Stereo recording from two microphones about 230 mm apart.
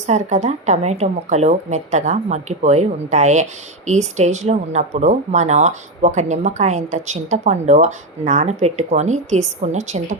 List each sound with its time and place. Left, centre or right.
0.1 s speech: right